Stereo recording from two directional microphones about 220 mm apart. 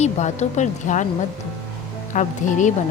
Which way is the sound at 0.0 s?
30° left (ahead or behind).